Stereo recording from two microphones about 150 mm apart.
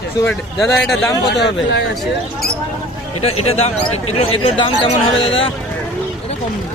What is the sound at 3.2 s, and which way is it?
Speech, 40° left (ahead or behind).